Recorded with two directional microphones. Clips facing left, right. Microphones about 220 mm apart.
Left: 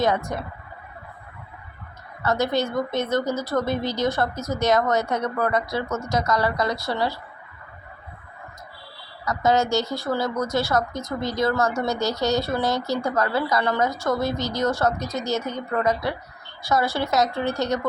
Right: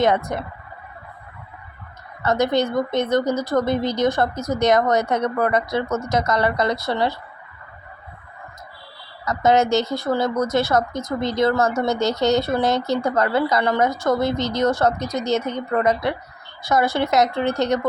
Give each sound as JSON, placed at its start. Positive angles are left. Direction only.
{"t": 0.0, "sound": "a woman's voice", "side_deg": -20}
{"t": 2.2, "sound": "a woman's voice", "side_deg": -20}
{"t": 9.2, "sound": "a woman's voice", "side_deg": -20}